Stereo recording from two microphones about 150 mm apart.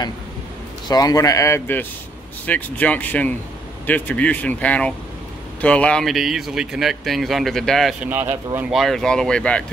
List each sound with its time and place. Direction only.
0.8 s a man's voice: 25° left (ahead or behind); by 7.9 s centre (ahead or behind)
8.0 s speech: 10° right (ahead or behind); by 9.7 s 5° left (ahead or behind)